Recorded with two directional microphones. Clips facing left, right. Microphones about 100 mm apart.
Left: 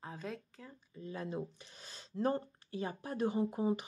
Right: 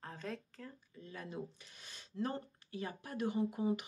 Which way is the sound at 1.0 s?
25° left (ahead or behind).